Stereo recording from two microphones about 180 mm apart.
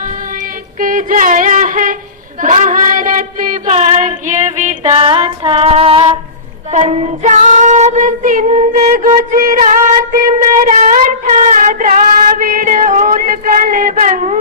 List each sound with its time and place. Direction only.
0.8 s a sound: 50° right (ahead or behind)
2.4 s child singing: 45° right (ahead or behind)
6.7 s female singing: 40° right (ahead or behind)